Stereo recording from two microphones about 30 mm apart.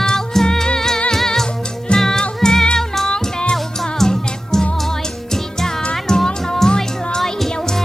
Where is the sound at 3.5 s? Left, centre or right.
Centre.